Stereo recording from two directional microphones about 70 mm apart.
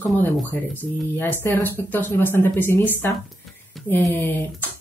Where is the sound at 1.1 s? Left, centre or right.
Left.